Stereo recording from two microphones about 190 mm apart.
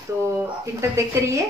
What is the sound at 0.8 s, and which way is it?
Speech, 15° right (ahead or behind).